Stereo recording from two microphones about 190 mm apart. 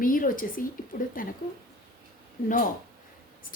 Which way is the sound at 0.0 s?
45° left (ahead or behind).